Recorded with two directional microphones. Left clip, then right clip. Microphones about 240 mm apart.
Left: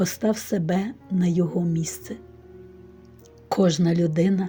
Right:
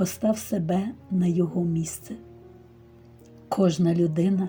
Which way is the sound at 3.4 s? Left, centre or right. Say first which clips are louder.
Left 2 dB; left.